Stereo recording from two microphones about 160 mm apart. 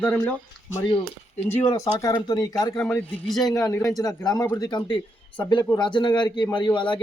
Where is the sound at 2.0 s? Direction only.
25° left (ahead or behind).